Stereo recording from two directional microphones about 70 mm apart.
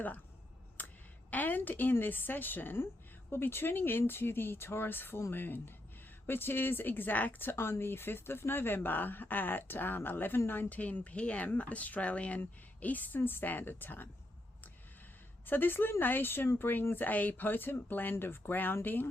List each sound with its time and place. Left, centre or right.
0.8 s a sound: left
1.3 s a woman's voice: left
15.4 s a woman's voice: left